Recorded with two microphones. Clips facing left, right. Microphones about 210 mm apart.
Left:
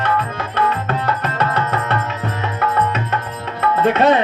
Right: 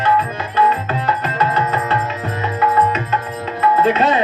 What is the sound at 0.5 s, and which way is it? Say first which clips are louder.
Music: right 2 dB; 65° left (ahead or behind).